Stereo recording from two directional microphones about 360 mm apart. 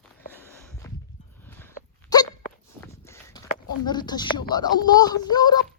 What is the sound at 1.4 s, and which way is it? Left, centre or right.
Dog, centre.